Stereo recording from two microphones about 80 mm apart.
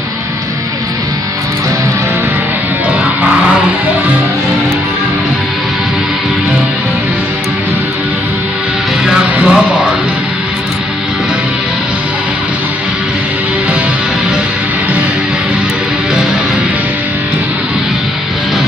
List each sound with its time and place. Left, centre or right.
9.0 s music: centre